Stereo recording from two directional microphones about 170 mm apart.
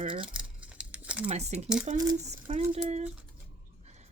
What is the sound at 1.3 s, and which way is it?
Speech, 40° right (ahead or behind).